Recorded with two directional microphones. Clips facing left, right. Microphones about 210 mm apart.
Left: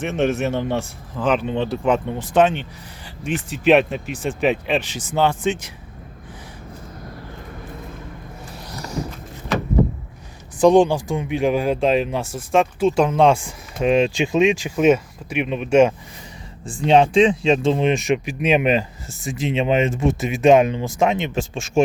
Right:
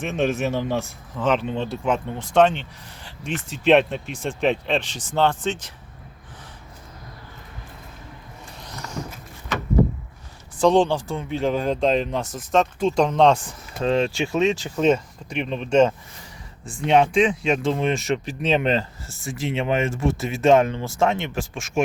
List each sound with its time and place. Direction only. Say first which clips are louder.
0.0 s speech: left 2 dB; centre (ahead or behind)
8.7 s vehicle: left 4 dB; 35° left (ahead or behind)
10.6 s speech: left 4 dB; 15° left (ahead or behind)
16.6 s speech: left 3 dB; 30° left (ahead or behind)